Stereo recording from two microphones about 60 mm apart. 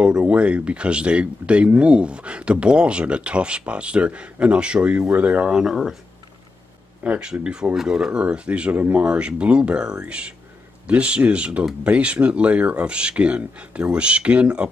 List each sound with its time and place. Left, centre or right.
0.0 s speech: right
5.5 s speech: centre
7.2 s speech: centre